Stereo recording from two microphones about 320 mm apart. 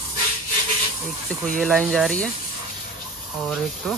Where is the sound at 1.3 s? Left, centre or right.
Centre.